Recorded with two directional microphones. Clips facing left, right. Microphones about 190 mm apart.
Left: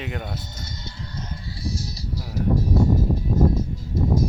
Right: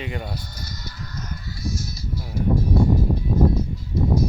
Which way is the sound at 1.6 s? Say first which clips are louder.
Right 1 dB; 35° left (ahead or behind).